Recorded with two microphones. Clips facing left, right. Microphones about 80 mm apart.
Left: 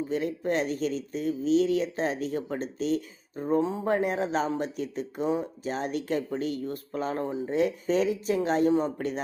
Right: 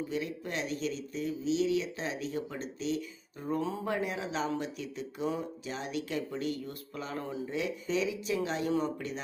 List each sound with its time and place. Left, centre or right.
0.1 s speech: left
3.9 s speech: left